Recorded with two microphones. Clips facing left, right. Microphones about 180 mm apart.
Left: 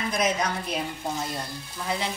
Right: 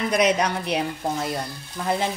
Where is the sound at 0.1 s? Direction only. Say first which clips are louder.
Right 5 dB; 70° right (ahead or behind).